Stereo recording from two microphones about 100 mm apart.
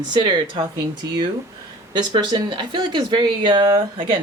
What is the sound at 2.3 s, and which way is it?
Speech, 45° right (ahead or behind).